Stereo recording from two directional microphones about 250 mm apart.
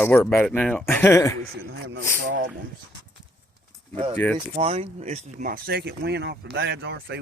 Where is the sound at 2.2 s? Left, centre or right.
Right.